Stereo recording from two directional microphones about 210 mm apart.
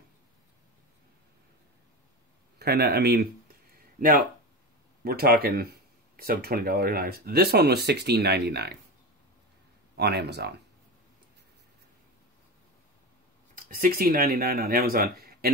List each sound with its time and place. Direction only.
2.6 s speech: 50° right (ahead or behind)
9.9 s speech: 50° right (ahead or behind)
13.7 s speech: 45° right (ahead or behind)